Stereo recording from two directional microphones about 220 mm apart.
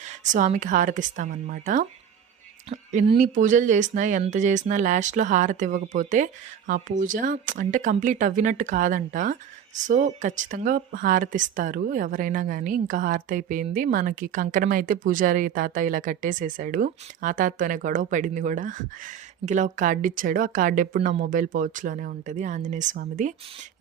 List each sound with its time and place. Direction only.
0.3 s speech: 35° right (ahead or behind)